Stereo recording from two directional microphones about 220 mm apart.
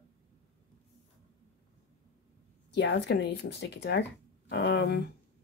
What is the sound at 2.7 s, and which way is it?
Speech, 50° left (ahead or behind).